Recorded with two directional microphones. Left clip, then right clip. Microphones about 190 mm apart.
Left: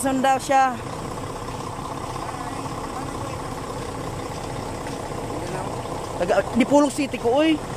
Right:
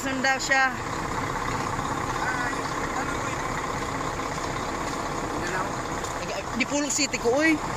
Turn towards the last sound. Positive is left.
turn(degrees=10)  # may be behind; listen again after turning